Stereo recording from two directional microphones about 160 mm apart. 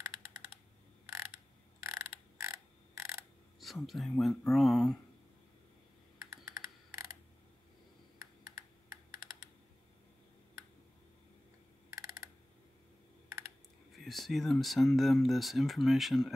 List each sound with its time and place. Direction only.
1.0 s mechanisms: 15° right (ahead or behind)
1.8 s a sound: 20° right (ahead or behind)
3.5 s speech: centre (ahead or behind)
6.3 s typing: 20° right (ahead or behind)
11.9 s mechanisms: 20° right (ahead or behind)
13.9 s speech: centre (ahead or behind)